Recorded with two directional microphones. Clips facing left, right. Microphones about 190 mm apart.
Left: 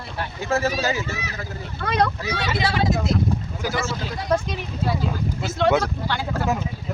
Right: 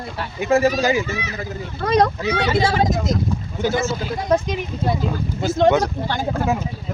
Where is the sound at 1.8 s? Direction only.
45° right (ahead or behind).